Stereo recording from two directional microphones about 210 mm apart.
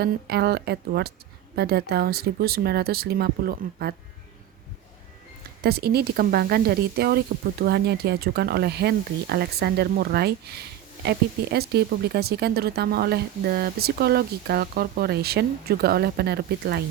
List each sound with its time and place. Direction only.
0.0 s speech: 50° right (ahead or behind)
5.6 s speech: 50° right (ahead or behind)